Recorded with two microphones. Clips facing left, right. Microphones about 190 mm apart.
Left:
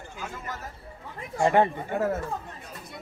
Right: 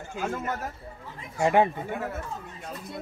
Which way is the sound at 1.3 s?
10° right (ahead or behind).